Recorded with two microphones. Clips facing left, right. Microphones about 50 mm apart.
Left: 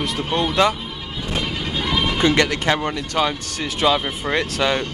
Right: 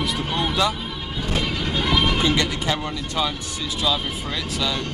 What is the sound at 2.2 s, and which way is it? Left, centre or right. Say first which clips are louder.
Speech: left 4 dB; left.